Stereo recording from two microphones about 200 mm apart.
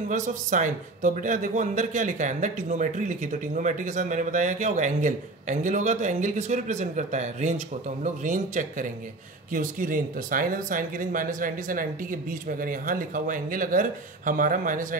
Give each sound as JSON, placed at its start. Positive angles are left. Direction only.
{"t": 0.1, "sound": "speech", "side_deg": -40}